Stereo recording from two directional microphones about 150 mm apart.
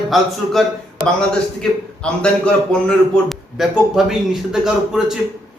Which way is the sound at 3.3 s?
5° right (ahead or behind).